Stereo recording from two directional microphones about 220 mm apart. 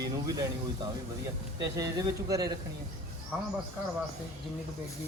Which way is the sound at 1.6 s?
15° right (ahead or behind).